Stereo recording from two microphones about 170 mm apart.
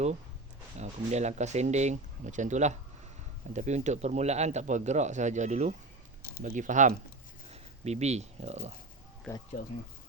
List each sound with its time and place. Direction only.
0.8 s a man's voice: 40° right (ahead or behind)